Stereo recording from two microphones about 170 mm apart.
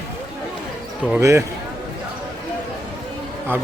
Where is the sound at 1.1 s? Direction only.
15° right (ahead or behind).